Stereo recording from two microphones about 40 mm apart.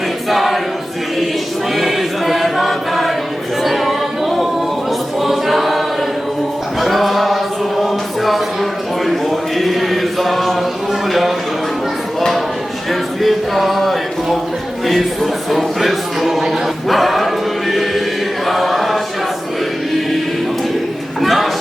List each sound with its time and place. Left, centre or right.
0.3 s choir: centre
1.7 s choir: centre
3.6 s music: centre
5.2 s choir: centre
6.7 s music: centre
9.0 s a sound: centre
12.9 s music: centre
14.8 s a sound: centre
18.4 s choir: centre
21.2 s a sound: centre